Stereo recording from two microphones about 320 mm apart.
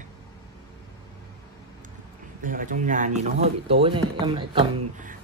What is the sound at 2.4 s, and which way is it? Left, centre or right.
Speech, right.